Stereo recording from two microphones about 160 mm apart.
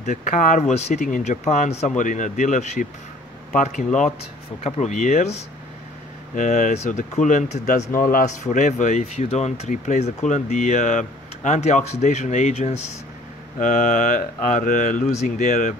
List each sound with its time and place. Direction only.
0.0 s speech: 50° left (ahead or behind)